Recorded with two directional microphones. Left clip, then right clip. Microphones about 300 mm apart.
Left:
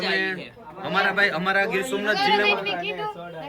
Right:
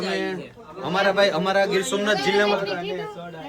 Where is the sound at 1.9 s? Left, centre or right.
Right.